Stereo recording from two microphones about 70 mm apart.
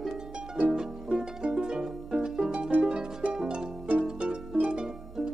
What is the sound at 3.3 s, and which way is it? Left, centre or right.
Harp, centre.